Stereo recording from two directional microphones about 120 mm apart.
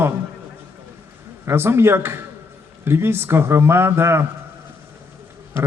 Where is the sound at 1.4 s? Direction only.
20° right (ahead or behind).